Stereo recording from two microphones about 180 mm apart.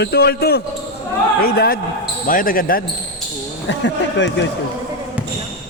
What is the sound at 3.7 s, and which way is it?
Speech, 80° left.